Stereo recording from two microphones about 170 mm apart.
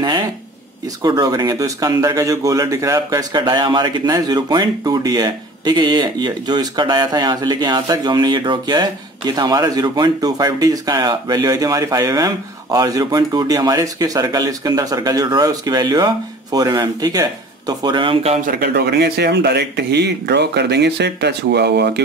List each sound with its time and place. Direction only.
1.0 s speech: 25° right (ahead or behind)
18.4 s speech: 60° right (ahead or behind); by 22.0 s 85° right